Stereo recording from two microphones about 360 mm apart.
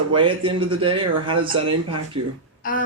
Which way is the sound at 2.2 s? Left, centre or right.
Right.